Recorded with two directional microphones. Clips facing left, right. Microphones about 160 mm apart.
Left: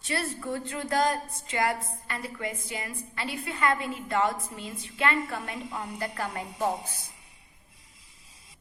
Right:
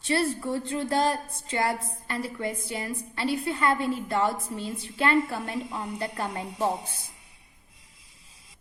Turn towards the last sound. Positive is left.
turn(degrees=-30)  # may be behind; listen again after turning